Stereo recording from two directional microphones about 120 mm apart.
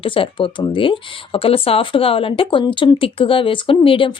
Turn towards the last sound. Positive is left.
turn(degrees=50)  # may be behind; listen again after turning